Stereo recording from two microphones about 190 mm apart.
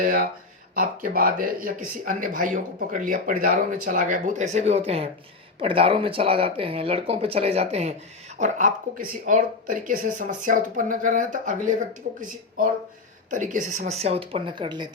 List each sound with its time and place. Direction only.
0.0 s speech: 45° right (ahead or behind)
13.3 s speech: 40° right (ahead or behind); by 14.8 s 25° right (ahead or behind)